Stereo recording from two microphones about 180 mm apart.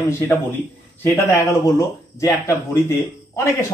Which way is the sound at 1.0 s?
15° left (ahead or behind).